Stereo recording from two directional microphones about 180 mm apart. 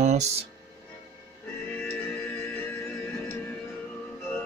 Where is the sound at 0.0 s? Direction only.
40° right (ahead or behind).